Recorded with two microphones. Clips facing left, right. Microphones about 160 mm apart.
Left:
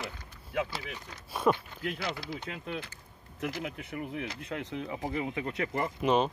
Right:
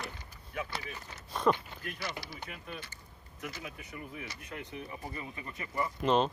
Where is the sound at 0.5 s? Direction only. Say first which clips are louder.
Left 7 dB; 90° left.